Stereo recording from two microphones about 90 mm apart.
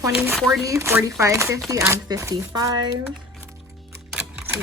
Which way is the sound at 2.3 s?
45° right (ahead or behind).